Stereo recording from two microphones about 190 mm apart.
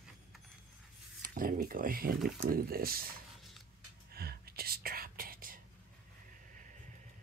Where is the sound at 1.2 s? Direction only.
50° right (ahead or behind).